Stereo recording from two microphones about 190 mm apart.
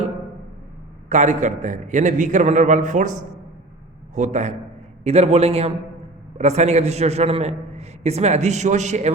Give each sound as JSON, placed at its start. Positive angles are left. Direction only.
{"t": 1.1, "sound": "a man's voice", "side_deg": -40}